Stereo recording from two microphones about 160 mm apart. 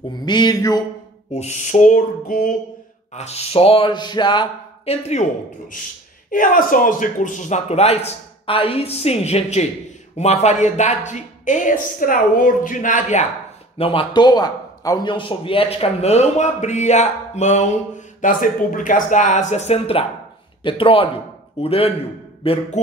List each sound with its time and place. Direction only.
0.2 s a sound: 25° left (ahead or behind)
1.3 s a man's voice: 45° left (ahead or behind)
3.1 s speech: 45° left (ahead or behind)
6.3 s a man's voice: 55° left (ahead or behind)
13.7 s a man's voice: 35° left (ahead or behind)